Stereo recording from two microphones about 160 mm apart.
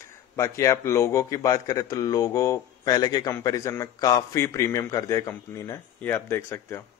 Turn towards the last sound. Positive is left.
turn(degrees=15)  # may be behind; listen again after turning